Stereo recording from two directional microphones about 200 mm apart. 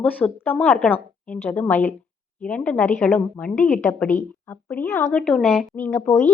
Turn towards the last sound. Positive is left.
turn(degrees=10)  # may be behind; listen again after turning